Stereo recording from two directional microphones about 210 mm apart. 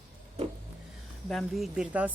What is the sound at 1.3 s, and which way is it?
Speech, centre (ahead or behind).